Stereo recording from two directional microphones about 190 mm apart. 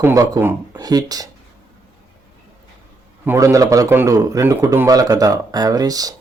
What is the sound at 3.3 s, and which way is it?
A man's voice, 15° right (ahead or behind).